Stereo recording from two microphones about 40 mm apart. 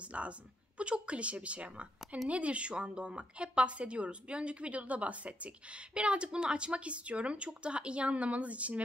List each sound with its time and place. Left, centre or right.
0.0 s a woman's voice: right